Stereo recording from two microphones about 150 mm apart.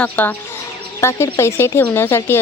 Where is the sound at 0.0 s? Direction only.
10° left (ahead or behind).